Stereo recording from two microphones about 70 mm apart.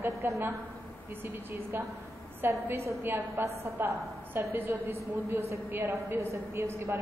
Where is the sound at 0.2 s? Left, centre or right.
Right.